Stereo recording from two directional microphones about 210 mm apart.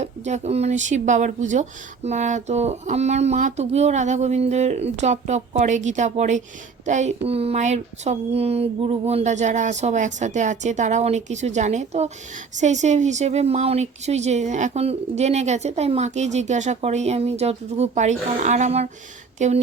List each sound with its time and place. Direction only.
0.0 s speech: 35° right (ahead or behind)